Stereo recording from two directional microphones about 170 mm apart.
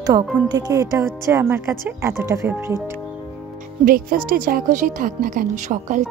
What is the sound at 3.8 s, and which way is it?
A woman's voice, 60° right (ahead or behind).